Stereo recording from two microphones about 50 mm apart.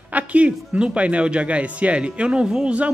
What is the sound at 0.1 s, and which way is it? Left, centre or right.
Speech, right.